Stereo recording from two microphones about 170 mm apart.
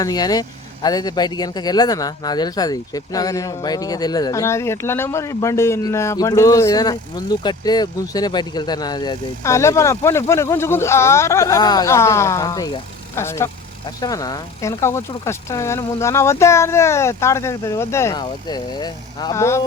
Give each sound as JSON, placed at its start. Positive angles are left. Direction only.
{"t": 0.0, "sound": "speech", "side_deg": 20}